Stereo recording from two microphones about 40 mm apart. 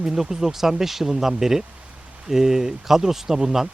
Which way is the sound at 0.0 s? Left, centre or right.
Centre.